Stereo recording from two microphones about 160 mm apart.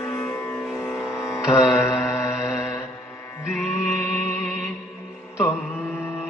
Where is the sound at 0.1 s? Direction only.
15° left (ahead or behind).